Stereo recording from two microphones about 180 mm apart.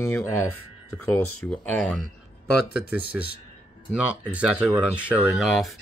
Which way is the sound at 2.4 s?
65° left (ahead or behind).